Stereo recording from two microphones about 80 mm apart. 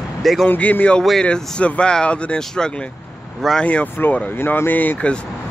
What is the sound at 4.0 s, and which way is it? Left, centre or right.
Speech, left.